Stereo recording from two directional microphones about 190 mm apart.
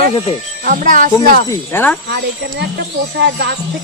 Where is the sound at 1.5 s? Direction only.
10° left (ahead or behind).